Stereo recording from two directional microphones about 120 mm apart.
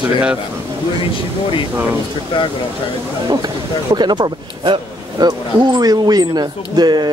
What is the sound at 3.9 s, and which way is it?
A man's voice, 40° right (ahead or behind).